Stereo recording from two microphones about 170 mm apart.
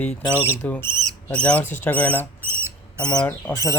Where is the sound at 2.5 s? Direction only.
15° right (ahead or behind).